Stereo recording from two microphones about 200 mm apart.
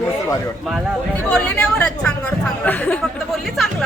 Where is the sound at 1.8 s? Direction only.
5° left (ahead or behind).